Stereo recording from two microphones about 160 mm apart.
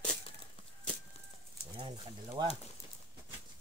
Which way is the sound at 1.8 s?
30° right (ahead or behind).